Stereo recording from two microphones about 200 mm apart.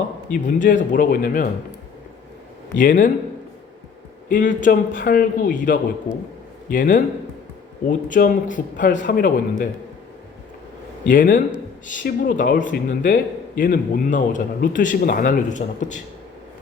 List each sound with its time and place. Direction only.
0.4 s speech: 40° left (ahead or behind)
2.7 s speech: 40° left (ahead or behind)
4.3 s speech: 40° left (ahead or behind)
11.1 s speech: 45° left (ahead or behind)